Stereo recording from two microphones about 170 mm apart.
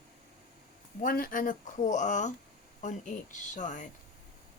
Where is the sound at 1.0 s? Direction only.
55° left (ahead or behind).